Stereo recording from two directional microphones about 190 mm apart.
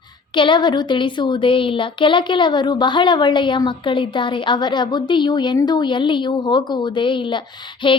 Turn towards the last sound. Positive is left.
turn(degrees=25)  # may be behind; listen again after turning